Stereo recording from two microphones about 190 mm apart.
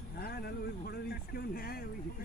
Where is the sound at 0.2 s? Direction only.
55° left (ahead or behind).